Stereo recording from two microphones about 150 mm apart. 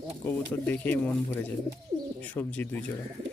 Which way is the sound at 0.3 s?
10° left (ahead or behind).